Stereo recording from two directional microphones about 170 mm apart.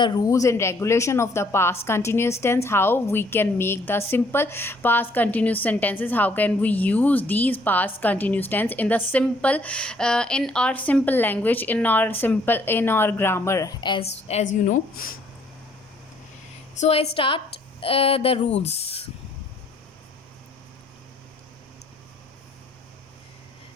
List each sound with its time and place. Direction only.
0.0 s speech: 25° left (ahead or behind); by 15.1 s 55° left (ahead or behind)
16.8 s a woman's voice: 35° left (ahead or behind)